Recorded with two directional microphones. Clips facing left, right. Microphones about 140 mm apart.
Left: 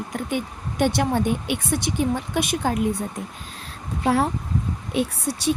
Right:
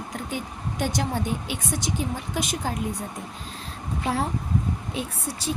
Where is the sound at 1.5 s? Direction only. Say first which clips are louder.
Left 4 dB; 60° left (ahead or behind).